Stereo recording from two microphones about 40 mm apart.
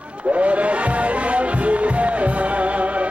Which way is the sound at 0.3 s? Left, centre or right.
Right.